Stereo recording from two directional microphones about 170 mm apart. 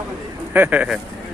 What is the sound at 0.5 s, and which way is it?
Speech, 10° right (ahead or behind).